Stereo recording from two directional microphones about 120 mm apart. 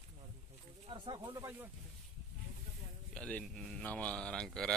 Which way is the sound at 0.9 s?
40° right (ahead or behind).